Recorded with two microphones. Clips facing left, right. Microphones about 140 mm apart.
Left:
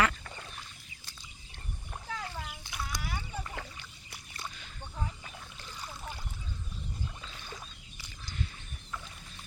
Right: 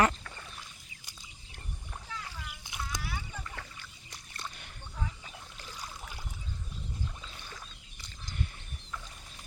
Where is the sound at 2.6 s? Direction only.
20° right (ahead or behind).